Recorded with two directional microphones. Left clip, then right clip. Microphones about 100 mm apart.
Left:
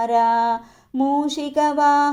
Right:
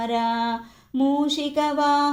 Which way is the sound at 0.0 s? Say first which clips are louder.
Left 6 dB; 50° left (ahead or behind).